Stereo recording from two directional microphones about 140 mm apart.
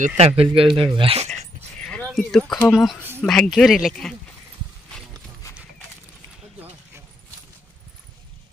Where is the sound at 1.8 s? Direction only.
10° left (ahead or behind).